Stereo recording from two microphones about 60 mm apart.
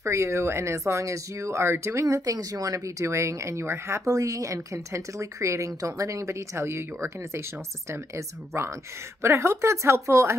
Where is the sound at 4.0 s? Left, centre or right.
Right.